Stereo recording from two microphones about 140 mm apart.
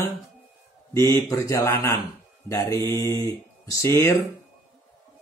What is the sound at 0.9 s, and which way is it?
Speech, 20° left (ahead or behind).